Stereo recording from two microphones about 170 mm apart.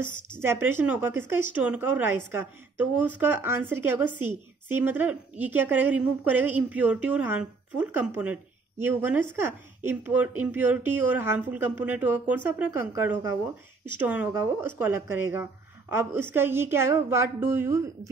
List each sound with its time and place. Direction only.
0.0 s speech: 15° right (ahead or behind)